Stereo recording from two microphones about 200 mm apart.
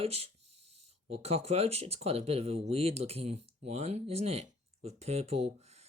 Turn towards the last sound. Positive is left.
turn(degrees=-30)  # may be behind; listen again after turning